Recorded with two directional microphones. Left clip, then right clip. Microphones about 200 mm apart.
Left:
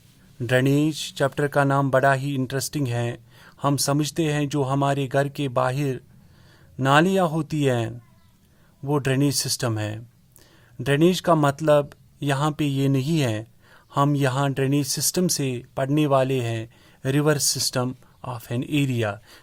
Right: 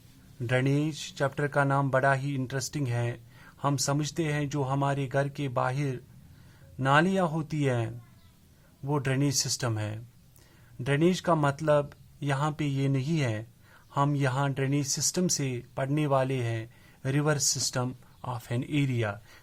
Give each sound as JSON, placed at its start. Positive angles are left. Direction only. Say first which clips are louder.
{"t": 0.4, "sound": "speech", "louder": "left 8 dB", "side_deg": 40}